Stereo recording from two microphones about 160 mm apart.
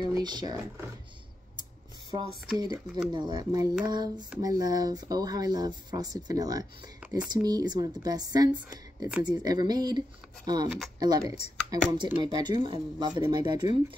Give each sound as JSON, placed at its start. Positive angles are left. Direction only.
{"t": 0.0, "sound": "speech", "side_deg": -25}
{"t": 2.5, "sound": "speech", "side_deg": -25}